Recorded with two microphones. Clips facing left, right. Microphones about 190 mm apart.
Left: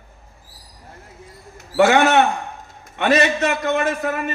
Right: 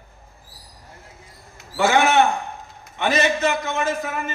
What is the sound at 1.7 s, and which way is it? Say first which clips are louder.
Speech: left 3 dB; 65° left (ahead or behind).